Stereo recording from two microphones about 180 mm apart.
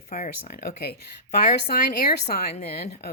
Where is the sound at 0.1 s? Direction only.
40° left (ahead or behind).